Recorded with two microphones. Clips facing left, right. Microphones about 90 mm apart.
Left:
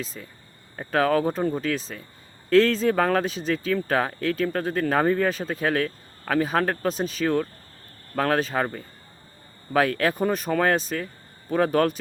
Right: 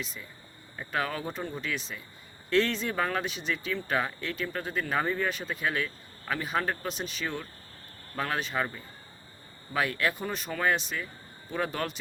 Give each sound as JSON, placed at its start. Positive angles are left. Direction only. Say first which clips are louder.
{"t": 0.8, "sound": "speech", "louder": "left 10 dB", "side_deg": 50}
{"t": 5.3, "sound": "speech", "louder": "left 6 dB", "side_deg": 35}
{"t": 6.9, "sound": "speech", "louder": "left 9 dB", "side_deg": 40}
{"t": 8.1, "sound": "speech", "louder": "left 8 dB", "side_deg": 50}
{"t": 10.0, "sound": "speech", "louder": "left 7 dB", "side_deg": 45}